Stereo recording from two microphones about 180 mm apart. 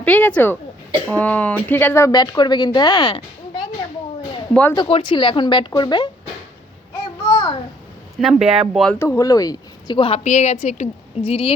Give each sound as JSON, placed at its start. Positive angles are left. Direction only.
{"t": 0.0, "sound": "speech", "side_deg": 10}
{"t": 4.7, "sound": "speech", "side_deg": 30}
{"t": 7.3, "sound": "a sound", "side_deg": 20}
{"t": 8.2, "sound": "speech", "side_deg": -5}
{"t": 8.9, "sound": "a woman's voice", "side_deg": 15}